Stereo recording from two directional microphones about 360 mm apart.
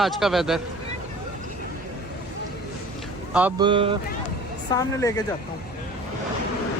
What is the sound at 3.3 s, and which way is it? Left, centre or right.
Speech, centre.